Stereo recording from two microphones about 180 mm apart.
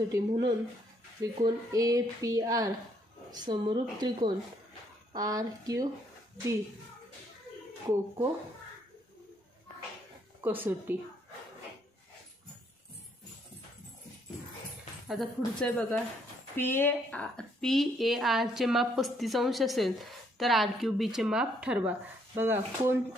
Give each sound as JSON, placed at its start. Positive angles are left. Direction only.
{"t": 0.1, "sound": "a woman's voice", "side_deg": -20}
{"t": 10.4, "sound": "speech", "side_deg": -10}
{"t": 15.0, "sound": "a woman's voice", "side_deg": 5}